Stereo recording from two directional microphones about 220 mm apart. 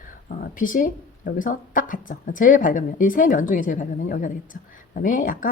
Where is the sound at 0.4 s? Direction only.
40° left (ahead or behind).